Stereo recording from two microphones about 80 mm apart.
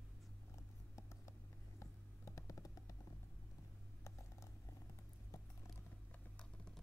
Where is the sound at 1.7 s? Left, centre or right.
Left.